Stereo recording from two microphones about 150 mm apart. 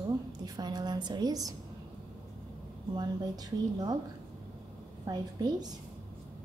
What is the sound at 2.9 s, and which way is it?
A woman's voice, 25° right (ahead or behind).